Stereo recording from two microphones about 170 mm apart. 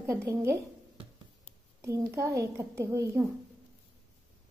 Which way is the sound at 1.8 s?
15° right (ahead or behind).